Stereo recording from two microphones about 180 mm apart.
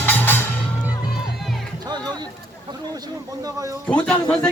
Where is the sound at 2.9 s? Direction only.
20° right (ahead or behind).